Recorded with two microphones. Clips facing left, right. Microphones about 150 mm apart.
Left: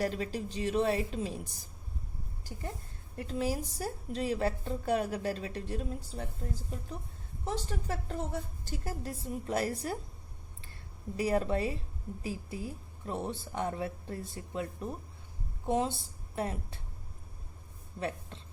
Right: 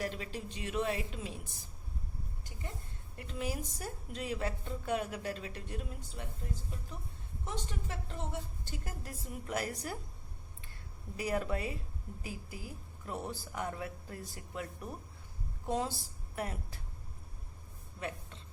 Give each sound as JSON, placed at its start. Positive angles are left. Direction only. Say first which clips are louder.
{"t": 0.0, "sound": "a woman's voice", "louder": "left 6 dB", "side_deg": 40}
{"t": 3.2, "sound": "a woman's voice", "louder": "left 6 dB", "side_deg": 35}
{"t": 7.4, "sound": "a woman's voice", "louder": "left 6 dB", "side_deg": 35}
{"t": 11.2, "sound": "a woman's voice", "louder": "left 5 dB", "side_deg": 30}
{"t": 18.0, "sound": "a woman's voice", "louder": "left 5 dB", "side_deg": 30}